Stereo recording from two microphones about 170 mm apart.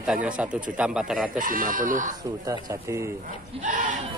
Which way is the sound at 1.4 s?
55° right (ahead or behind).